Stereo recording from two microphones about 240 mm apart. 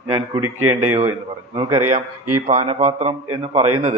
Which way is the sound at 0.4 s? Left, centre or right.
Right.